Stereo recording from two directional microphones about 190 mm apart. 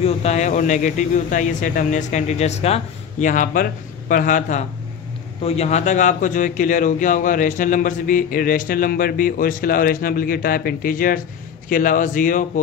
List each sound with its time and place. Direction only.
0.0 s a man's voice: 35° left (ahead or behind)